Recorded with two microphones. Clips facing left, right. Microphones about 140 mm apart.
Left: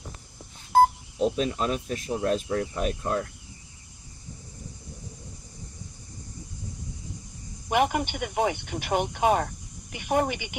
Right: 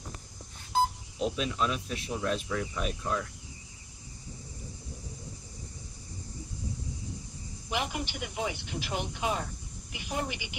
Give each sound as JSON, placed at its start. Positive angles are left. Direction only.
{"t": 0.7, "sound": "a sound", "side_deg": 55}
{"t": 1.2, "sound": "speech", "side_deg": 40}
{"t": 7.7, "sound": "speech", "side_deg": 55}